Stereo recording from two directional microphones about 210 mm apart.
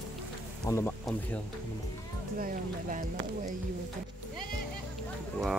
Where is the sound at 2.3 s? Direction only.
40° right (ahead or behind).